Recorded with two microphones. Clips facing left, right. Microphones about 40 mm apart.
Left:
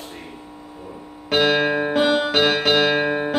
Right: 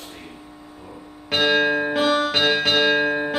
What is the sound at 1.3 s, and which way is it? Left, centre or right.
Music, centre.